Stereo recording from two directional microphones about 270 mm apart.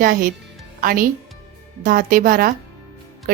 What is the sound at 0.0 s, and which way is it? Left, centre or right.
A woman's voice, right.